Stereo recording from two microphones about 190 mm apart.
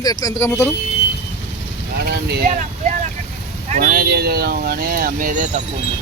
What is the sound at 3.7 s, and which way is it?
Speech, 50° right (ahead or behind).